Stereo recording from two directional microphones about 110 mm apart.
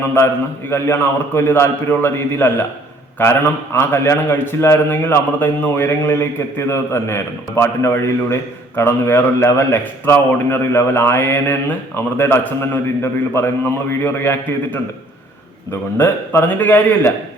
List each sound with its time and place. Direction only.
0.7 s a man's voice: 20° left (ahead or behind)
16.0 s a man's voice: 20° left (ahead or behind)